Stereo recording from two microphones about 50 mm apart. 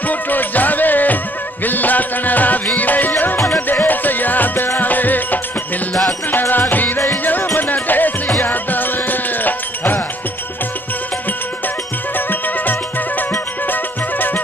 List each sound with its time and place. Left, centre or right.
0.1 s music: left
6.5 s music: left
13.7 s music: left